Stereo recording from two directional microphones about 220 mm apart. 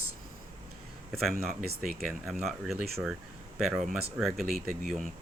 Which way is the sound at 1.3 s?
40° right (ahead or behind).